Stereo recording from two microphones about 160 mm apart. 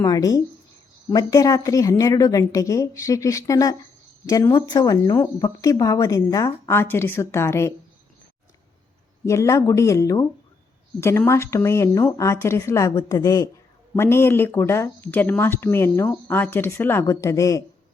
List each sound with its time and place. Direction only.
0.0 s speech: 20° left (ahead or behind)
9.2 s speech: 20° left (ahead or behind)